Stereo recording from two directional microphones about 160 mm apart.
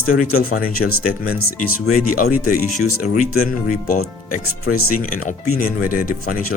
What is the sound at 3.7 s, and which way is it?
Speech, 55° left (ahead or behind).